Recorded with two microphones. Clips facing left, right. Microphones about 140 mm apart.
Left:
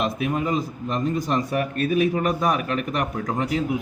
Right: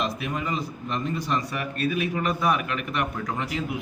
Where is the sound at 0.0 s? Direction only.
50° left (ahead or behind).